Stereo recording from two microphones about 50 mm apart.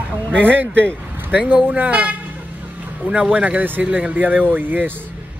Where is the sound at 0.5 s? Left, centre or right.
Right.